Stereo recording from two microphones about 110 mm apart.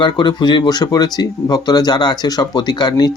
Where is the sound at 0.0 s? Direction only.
45° left (ahead or behind).